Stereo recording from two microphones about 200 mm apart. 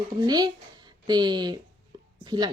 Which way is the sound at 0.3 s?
20° right (ahead or behind).